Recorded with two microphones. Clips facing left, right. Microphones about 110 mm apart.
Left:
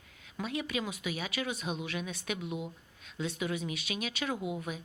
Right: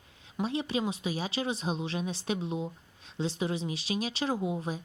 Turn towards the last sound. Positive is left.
turn(degrees=-30)  # may be behind; listen again after turning